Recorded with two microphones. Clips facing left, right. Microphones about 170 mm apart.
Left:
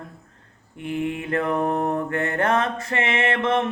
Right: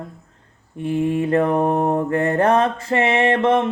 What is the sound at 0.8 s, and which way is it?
Mantra, 30° right (ahead or behind).